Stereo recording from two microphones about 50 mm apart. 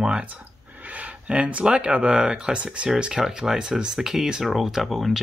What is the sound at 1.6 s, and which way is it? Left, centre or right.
Speech, right.